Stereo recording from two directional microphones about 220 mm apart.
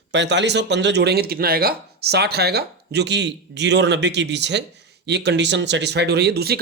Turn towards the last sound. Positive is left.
turn(degrees=-45)  # may be behind; listen again after turning